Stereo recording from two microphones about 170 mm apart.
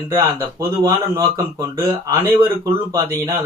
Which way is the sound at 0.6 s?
20° right (ahead or behind).